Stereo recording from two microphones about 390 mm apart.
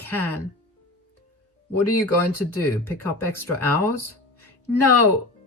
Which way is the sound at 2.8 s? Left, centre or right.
Centre.